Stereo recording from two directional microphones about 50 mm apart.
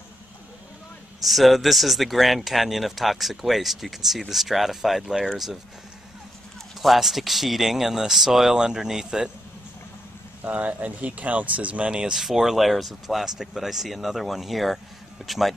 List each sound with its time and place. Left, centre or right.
1.2 s speech: centre
6.8 s speech: centre
10.4 s speech: right
11.9 s speech: centre